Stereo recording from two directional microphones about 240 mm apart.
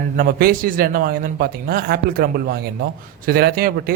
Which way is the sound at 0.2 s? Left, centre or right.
Right.